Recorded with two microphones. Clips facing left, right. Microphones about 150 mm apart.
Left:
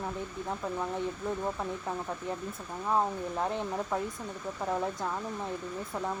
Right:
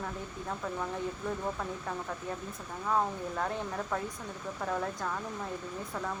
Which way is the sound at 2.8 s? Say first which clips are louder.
Left 2 dB; 15° left (ahead or behind).